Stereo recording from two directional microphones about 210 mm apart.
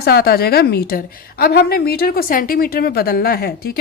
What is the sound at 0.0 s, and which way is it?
Speech, 50° left (ahead or behind).